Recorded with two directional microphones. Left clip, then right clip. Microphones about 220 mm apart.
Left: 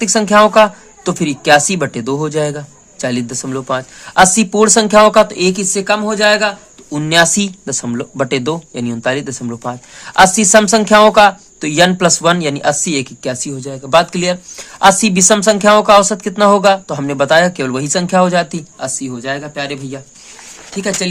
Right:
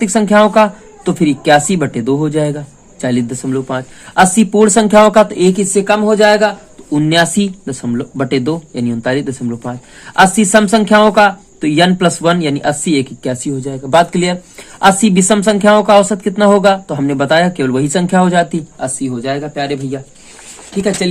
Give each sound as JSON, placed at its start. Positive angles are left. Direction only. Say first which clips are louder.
{"t": 0.1, "sound": "speech", "louder": "left 1 dB", "side_deg": 20}